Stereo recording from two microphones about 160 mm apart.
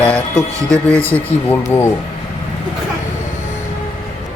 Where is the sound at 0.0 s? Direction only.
10° left (ahead or behind).